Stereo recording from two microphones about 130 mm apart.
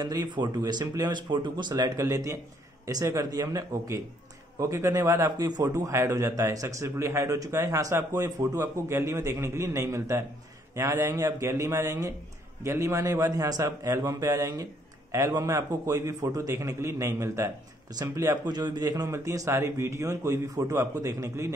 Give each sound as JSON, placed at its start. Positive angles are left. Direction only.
{"t": 0.0, "sound": "a man's voice", "side_deg": -35}